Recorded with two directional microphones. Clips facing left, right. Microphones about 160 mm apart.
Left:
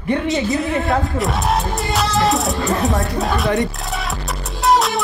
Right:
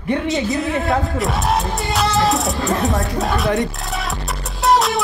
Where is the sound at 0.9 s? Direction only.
Centre (ahead or behind).